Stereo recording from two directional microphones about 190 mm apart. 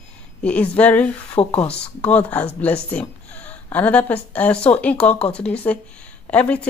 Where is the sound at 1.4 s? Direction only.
30° left (ahead or behind).